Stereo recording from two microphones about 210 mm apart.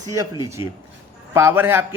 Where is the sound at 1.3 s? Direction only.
10° right (ahead or behind).